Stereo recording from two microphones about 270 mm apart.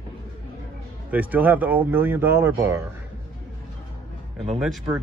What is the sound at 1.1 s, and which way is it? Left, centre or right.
A man's voice, centre.